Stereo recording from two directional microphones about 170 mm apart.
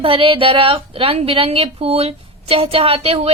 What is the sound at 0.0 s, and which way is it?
A woman's voice, 30° right (ahead or behind).